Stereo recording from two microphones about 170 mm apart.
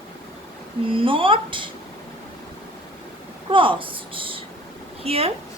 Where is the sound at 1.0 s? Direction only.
30° right (ahead or behind).